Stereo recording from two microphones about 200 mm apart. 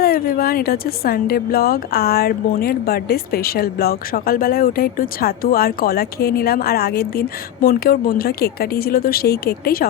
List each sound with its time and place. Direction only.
0.0 s speech: 50° left (ahead or behind)